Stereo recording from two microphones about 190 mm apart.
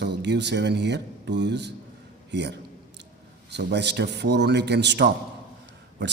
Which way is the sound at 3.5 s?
65° right (ahead or behind).